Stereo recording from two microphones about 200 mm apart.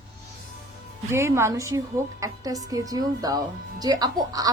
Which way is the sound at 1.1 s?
15° right (ahead or behind).